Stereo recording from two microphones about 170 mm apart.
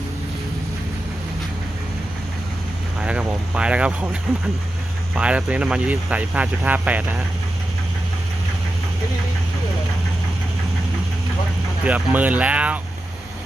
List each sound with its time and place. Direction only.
3.0 s speech: 5° right (ahead or behind)
11.9 s speech: 10° right (ahead or behind)